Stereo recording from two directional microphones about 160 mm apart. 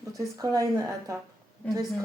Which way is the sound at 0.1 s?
20° right (ahead or behind).